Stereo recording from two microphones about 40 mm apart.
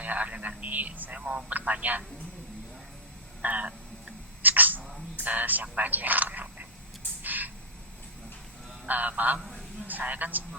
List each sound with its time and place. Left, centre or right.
0.0 s telephone: right
0.4 s speech: right
1.1 s a man's voice: right
1.5 s speech: right
3.4 s speech: right
4.4 s cat: right
5.1 s speech: right
7.2 s a sound: right
8.9 s speech: right